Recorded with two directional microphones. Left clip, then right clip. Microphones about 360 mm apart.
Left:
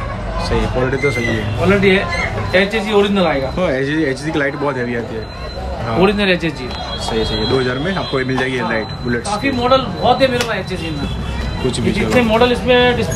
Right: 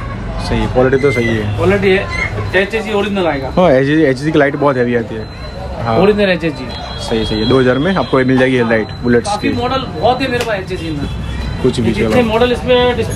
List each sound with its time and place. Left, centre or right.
0.5 s speech: centre